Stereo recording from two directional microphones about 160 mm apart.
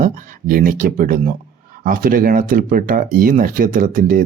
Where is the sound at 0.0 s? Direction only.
55° right (ahead or behind).